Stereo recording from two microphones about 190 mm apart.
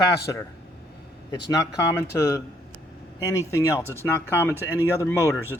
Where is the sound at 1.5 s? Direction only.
15° left (ahead or behind).